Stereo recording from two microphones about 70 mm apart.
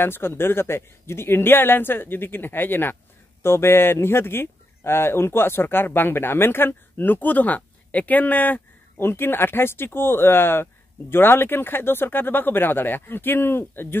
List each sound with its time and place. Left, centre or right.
0.0 s speech: left